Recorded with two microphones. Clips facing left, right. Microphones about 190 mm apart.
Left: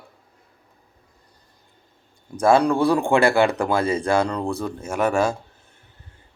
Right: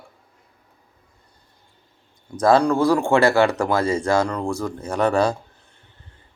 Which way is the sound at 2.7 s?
15° left (ahead or behind).